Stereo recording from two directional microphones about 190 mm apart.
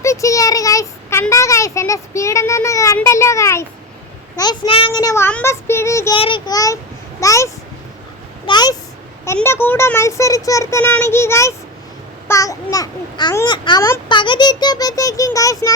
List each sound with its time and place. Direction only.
0.0 s child singing: 15° left (ahead or behind)
1.2 s speech: 15° left (ahead or behind)
6.1 s a child's voice: 25° left (ahead or behind)
8.4 s a sound: 20° left (ahead or behind)
9.2 s a child's voice: 15° left (ahead or behind)